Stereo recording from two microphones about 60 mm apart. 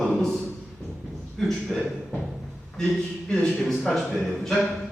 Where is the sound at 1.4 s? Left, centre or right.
Centre.